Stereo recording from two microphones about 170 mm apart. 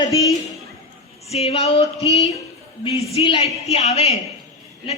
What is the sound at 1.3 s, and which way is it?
Speech, 40° left (ahead or behind).